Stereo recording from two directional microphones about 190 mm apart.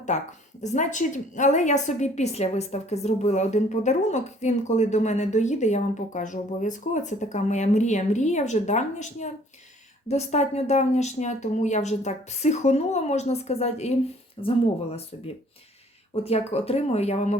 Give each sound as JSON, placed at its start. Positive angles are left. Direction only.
{"t": 0.0, "sound": "a woman's voice", "side_deg": 40}
{"t": 16.2, "sound": "a woman's voice", "side_deg": 35}